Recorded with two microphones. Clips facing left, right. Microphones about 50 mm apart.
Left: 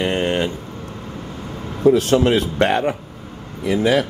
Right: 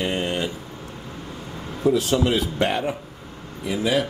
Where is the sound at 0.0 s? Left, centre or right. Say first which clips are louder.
Left 5 dB; left.